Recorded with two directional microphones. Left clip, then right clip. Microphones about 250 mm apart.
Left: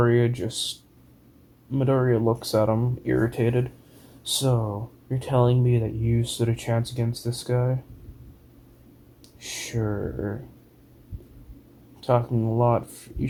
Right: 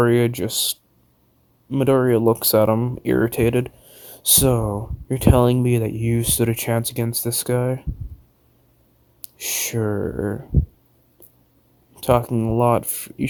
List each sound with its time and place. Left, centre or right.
0.0 s speech: right
9.2 s speech: right
11.9 s speech: right